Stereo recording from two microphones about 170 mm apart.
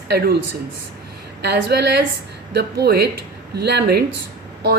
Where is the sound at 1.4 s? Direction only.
75° right (ahead or behind).